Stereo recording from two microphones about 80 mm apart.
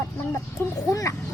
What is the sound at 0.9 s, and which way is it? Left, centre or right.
Speech, left.